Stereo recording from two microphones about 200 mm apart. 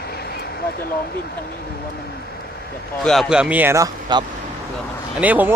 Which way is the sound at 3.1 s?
Centre (ahead or behind).